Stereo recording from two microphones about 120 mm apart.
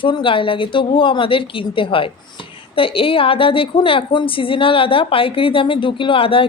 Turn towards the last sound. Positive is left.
turn(degrees=50)  # may be behind; listen again after turning